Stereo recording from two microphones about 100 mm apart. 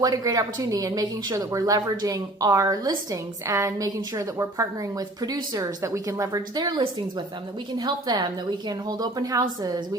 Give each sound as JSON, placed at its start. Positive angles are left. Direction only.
{"t": 0.0, "sound": "a woman's voice", "side_deg": -40}